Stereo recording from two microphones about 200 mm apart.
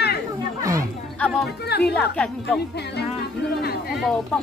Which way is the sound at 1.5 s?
55° left (ahead or behind).